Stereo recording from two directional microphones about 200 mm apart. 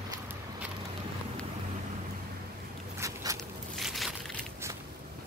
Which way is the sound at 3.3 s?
Centre (ahead or behind).